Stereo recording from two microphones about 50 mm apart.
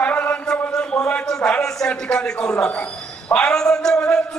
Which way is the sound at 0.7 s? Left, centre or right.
Centre.